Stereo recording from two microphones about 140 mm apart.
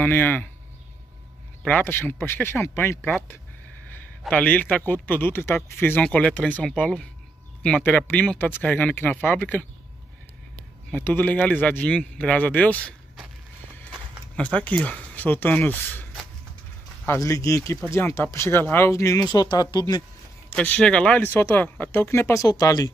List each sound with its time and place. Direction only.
0.0 s speech: 15° left (ahead or behind)
1.7 s speech: 15° left (ahead or behind)
4.3 s speech: 10° left (ahead or behind)
10.9 s speech: 15° left (ahead or behind)
14.3 s speech: 10° left (ahead or behind); by 20.0 s 30° left (ahead or behind)
20.4 s speech: 10° left (ahead or behind); by 22.8 s 25° left (ahead or behind)